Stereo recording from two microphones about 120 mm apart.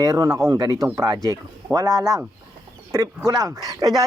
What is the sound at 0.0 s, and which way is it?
Speech, 30° right (ahead or behind).